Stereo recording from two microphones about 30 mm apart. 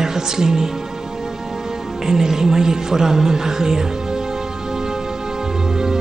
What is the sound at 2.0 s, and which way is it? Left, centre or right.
Speech, centre.